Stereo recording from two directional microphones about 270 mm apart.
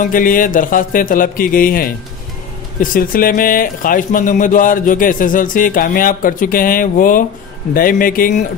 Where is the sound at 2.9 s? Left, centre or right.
Left.